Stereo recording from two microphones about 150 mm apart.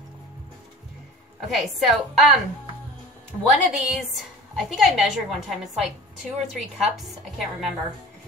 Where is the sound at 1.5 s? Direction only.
Centre (ahead or behind).